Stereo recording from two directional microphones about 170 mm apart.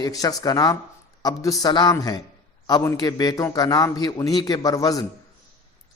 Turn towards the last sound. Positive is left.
turn(degrees=20)  # may be behind; listen again after turning